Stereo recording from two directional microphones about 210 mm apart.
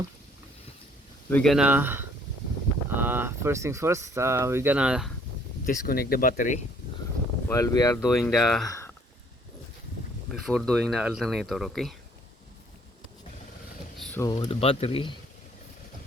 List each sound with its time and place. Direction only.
1.3 s speech: 5° left (ahead or behind)
5.6 s speech: 45° left (ahead or behind)
7.4 s speech: 15° left (ahead or behind)
8.2 s speech: centre (ahead or behind)
8.6 s speech: 15° left (ahead or behind)
10.4 s speech: centre (ahead or behind)
14.0 s a sound: 5° left (ahead or behind)
14.3 s speech: 25° left (ahead or behind)